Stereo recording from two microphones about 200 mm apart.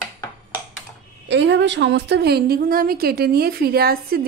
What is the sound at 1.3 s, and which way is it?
A woman's voice, 60° right (ahead or behind).